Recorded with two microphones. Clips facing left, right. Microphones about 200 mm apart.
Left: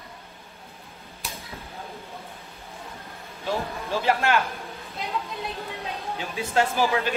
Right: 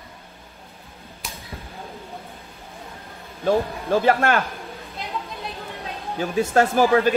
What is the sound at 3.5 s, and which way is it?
Speech, 50° right (ahead or behind).